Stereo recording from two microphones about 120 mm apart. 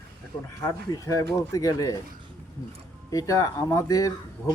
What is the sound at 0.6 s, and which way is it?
Speech, 30° left (ahead or behind).